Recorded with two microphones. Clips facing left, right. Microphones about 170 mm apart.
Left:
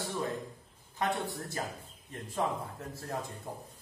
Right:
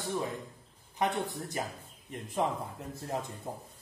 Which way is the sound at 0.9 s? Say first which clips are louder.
Right 2 dB; 20° right (ahead or behind).